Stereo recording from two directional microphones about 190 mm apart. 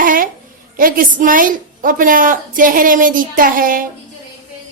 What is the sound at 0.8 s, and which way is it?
A woman's voice, 45° right (ahead or behind).